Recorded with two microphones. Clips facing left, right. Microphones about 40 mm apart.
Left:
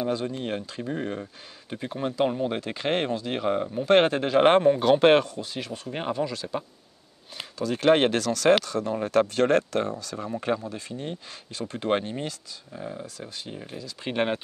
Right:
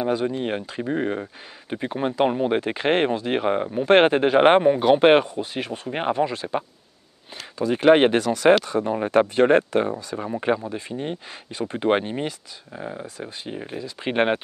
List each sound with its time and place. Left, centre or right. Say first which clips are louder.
0.0 s speech: right 5 dB; right